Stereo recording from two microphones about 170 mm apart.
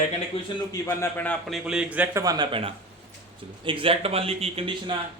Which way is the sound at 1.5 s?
5° right (ahead or behind).